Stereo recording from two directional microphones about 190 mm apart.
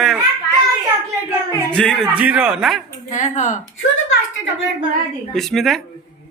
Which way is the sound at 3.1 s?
40° left (ahead or behind).